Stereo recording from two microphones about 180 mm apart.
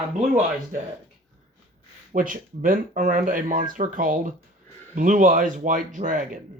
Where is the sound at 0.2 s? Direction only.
40° right (ahead or behind).